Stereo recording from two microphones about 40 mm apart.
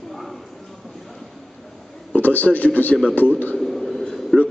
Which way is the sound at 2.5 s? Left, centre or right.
Left.